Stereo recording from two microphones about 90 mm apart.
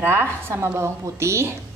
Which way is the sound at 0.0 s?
25° right (ahead or behind).